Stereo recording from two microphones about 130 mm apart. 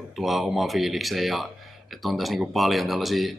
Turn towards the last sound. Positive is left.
turn(degrees=0)  # may be behind; listen again after turning